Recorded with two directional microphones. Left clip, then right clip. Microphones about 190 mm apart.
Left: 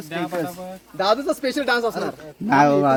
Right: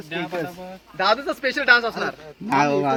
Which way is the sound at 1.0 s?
45° left (ahead or behind).